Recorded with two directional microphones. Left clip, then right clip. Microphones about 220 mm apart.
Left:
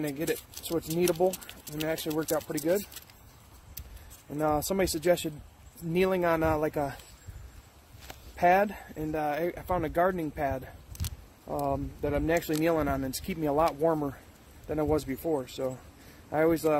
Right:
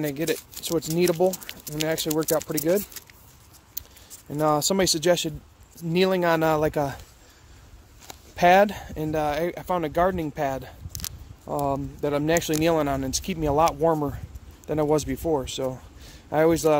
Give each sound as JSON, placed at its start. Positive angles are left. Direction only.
{"t": 0.0, "sound": "speech", "side_deg": -35}
{"t": 4.4, "sound": "speech", "side_deg": -40}
{"t": 8.4, "sound": "speech", "side_deg": -40}